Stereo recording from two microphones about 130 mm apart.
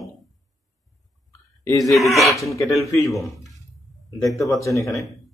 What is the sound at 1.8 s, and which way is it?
Speech, centre (ahead or behind).